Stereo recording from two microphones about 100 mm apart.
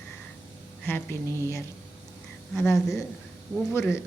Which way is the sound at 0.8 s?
25° left (ahead or behind).